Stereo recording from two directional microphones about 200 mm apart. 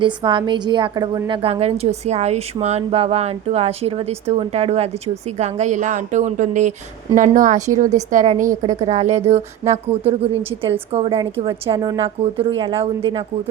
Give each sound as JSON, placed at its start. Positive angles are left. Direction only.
{"t": 0.0, "sound": "a woman's voice", "side_deg": -25}